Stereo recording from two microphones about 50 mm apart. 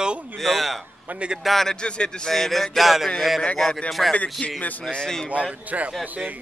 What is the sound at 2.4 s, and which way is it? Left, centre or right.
Speech, centre.